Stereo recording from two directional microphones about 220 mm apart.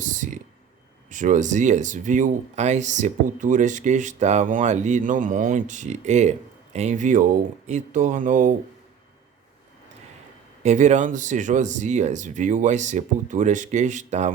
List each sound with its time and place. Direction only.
0.0 s a sound: 35° right (ahead or behind)
1.1 s speech: 35° right (ahead or behind)
10.6 s speech: 30° right (ahead or behind)